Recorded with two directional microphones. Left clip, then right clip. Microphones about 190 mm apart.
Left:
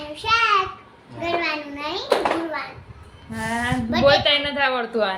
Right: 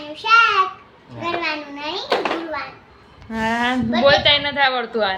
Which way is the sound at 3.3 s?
65° right (ahead or behind).